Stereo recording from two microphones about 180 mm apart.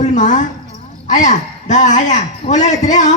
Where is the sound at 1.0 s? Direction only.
45° left (ahead or behind).